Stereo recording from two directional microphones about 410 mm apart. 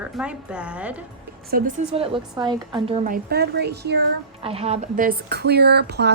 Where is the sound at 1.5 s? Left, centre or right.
Centre.